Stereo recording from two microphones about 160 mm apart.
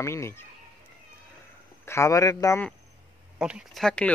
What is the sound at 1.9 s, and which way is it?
Speech, 20° left (ahead or behind).